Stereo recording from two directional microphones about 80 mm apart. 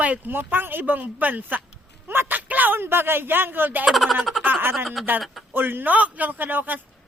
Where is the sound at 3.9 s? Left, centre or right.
Centre.